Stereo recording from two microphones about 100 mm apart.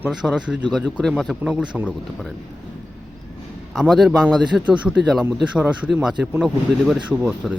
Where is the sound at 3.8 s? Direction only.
Centre (ahead or behind).